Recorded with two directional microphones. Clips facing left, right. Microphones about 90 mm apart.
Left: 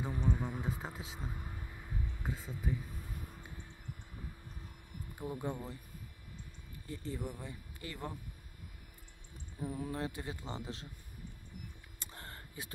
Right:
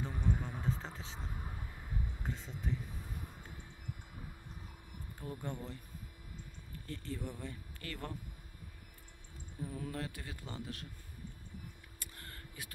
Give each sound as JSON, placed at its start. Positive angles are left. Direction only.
{"t": 0.0, "sound": "a sound", "side_deg": 15}
{"t": 2.2, "sound": "speech", "side_deg": 10}
{"t": 5.2, "sound": "speech", "side_deg": 15}
{"t": 6.9, "sound": "speech", "side_deg": 15}
{"t": 9.6, "sound": "speech", "side_deg": 15}
{"t": 12.0, "sound": "a sound", "side_deg": 25}